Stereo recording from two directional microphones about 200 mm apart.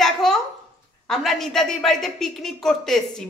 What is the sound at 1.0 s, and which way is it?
A woman's voice, centre (ahead or behind).